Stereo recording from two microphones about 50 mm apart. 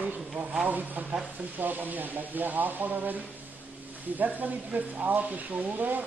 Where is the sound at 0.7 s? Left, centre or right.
Right.